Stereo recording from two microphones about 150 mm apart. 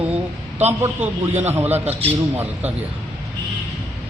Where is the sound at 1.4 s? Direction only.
15° right (ahead or behind).